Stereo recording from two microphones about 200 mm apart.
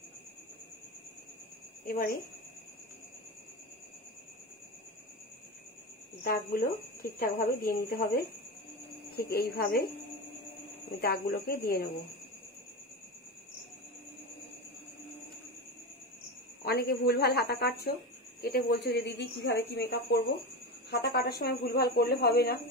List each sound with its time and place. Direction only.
1.9 s speech: 45° left (ahead or behind)
6.2 s speech: 50° left (ahead or behind)
10.9 s speech: 50° left (ahead or behind)
16.6 s speech: 50° left (ahead or behind)